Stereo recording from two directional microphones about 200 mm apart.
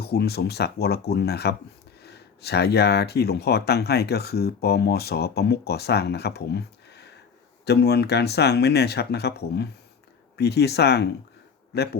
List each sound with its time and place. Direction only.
0.0 s speech: 50° left (ahead or behind)